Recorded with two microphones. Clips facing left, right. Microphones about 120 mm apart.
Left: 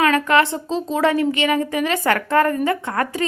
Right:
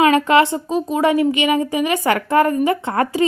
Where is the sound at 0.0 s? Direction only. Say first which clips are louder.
Right 3 dB; 15° right (ahead or behind).